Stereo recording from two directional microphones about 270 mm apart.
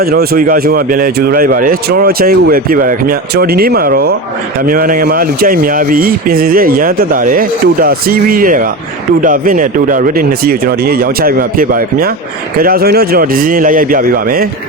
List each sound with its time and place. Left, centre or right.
0.0 s speech: right